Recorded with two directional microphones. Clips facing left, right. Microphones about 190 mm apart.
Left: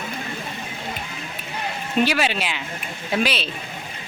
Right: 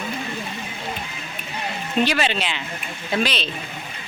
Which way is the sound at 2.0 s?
10° left (ahead or behind).